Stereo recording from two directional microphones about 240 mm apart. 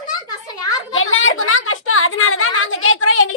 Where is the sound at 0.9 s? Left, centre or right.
Left.